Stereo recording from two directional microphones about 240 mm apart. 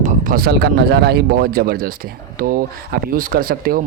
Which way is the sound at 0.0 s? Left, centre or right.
Right.